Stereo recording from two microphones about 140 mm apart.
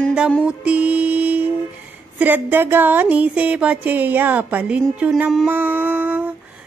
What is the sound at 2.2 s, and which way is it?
Speech, 15° right (ahead or behind).